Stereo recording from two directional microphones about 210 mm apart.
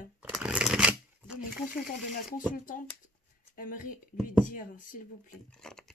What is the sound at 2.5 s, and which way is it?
Speech, 40° left (ahead or behind).